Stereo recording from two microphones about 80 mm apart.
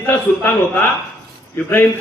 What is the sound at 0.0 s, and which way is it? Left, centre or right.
A man's voice, left.